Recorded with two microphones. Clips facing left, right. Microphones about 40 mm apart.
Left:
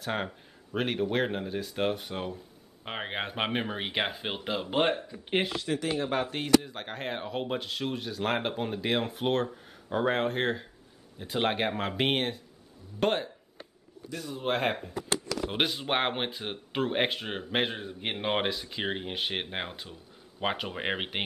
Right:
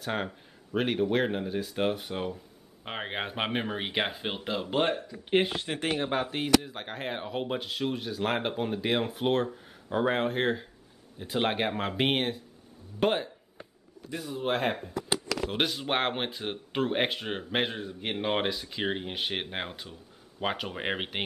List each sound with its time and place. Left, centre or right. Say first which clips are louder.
0.0 s speech: even; centre
4.8 s speech: left 1 dB; left
5.5 s speech: even; right
6.0 s speech: right 1 dB; centre